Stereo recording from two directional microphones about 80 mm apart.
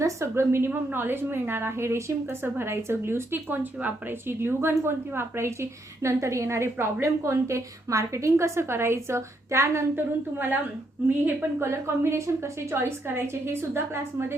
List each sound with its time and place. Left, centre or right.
0.0 s a woman's voice: right
9.9 s a woman's voice: right
11.6 s a woman's voice: right